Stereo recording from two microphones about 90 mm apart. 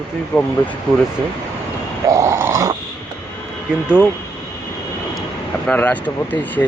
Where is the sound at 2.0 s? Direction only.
35° right (ahead or behind).